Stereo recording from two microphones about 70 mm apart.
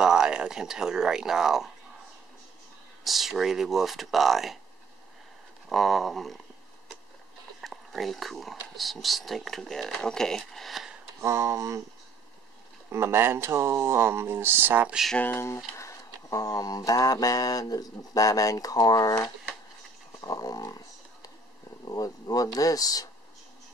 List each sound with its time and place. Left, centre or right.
0.0 s speech: centre
3.0 s speech: centre
5.7 s speech: centre
7.6 s speech: centre
11.1 s speech: right
12.9 s speech: right
15.1 s speech: left
15.8 s mantra: left
20.2 s a sound: left
21.8 s mantra: left